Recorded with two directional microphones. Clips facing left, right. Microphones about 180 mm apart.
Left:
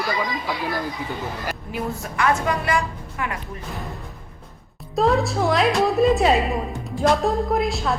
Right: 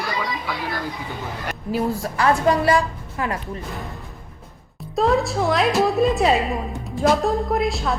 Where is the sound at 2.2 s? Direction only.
35° right (ahead or behind).